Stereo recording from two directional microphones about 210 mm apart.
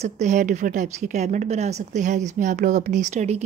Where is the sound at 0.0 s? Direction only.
35° right (ahead or behind).